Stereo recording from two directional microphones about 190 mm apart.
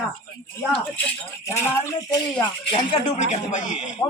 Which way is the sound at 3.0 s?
40° left (ahead or behind).